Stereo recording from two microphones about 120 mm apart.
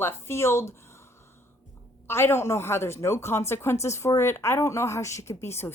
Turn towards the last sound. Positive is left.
turn(degrees=20)  # may be behind; listen again after turning